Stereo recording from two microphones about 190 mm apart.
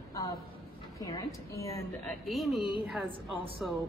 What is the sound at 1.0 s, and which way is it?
Speech, 20° left (ahead or behind).